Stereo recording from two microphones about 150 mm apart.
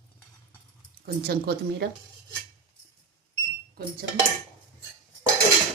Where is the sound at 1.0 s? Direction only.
90° right.